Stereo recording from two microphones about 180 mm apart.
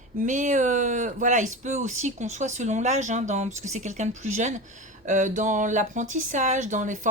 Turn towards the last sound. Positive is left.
turn(degrees=-45)  # may be behind; listen again after turning